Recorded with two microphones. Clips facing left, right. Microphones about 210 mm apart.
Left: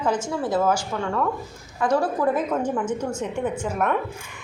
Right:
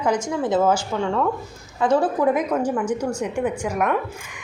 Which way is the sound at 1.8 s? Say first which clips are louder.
Right 3 dB; 20° right (ahead or behind).